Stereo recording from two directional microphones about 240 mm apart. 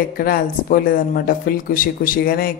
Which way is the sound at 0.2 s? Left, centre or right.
Left.